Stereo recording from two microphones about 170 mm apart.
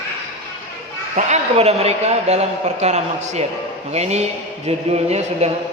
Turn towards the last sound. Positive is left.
turn(degrees=-40)  # may be behind; listen again after turning